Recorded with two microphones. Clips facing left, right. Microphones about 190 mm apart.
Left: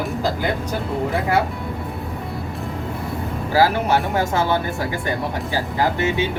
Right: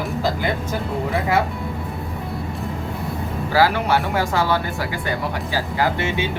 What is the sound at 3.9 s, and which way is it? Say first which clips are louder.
Speech: left 1 dB; 20° left (ahead or behind).